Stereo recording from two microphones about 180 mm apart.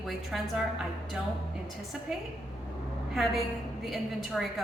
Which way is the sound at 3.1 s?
Centre (ahead or behind).